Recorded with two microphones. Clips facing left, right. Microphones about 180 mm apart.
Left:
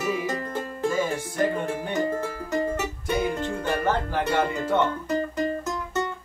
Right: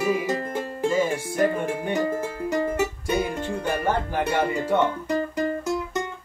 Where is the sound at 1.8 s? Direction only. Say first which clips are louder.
Right 1 dB; 15° right (ahead or behind).